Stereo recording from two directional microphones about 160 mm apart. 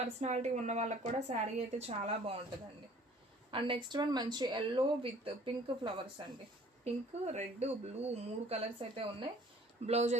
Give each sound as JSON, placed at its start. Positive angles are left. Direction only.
{"t": 0.0, "sound": "a woman's voice", "side_deg": -45}
{"t": 3.5, "sound": "a woman's voice", "side_deg": -35}
{"t": 6.8, "sound": "a woman's voice", "side_deg": -45}
{"t": 9.8, "sound": "a woman's voice", "side_deg": -45}